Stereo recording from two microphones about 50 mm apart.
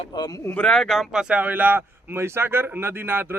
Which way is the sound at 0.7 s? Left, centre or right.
Centre.